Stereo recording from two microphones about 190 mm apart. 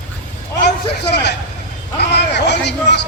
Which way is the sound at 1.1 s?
60° left (ahead or behind).